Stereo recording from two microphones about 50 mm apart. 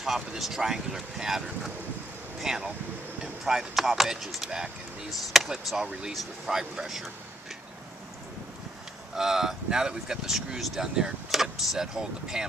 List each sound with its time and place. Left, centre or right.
0.0 s speech: centre
9.1 s speech: centre